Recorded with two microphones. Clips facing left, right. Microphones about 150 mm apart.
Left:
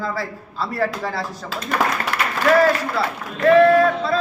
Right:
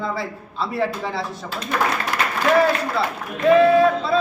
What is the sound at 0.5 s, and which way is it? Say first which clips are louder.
Speech: even; centre (ahead or behind).